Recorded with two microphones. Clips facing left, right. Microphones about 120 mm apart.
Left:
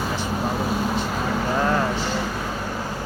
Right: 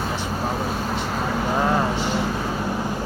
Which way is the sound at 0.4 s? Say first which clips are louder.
Left 2 dB; 5° left (ahead or behind).